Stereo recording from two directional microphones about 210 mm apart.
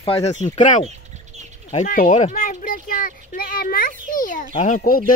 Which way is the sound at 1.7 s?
40° left (ahead or behind).